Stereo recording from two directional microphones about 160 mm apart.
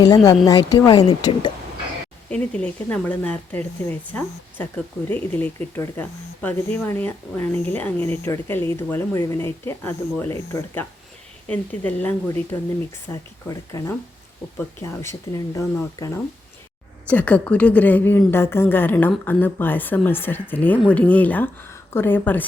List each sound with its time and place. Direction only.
0.4 s speech: 20° left (ahead or behind)
2.3 s speech: 5° left (ahead or behind)
17.1 s speech: 10° left (ahead or behind)